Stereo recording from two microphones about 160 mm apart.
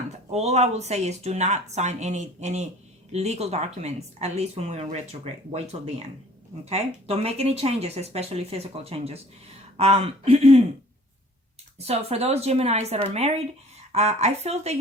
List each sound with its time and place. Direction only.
0.3 s a woman's voice: 45° right (ahead or behind)
11.8 s a woman's voice: 40° right (ahead or behind)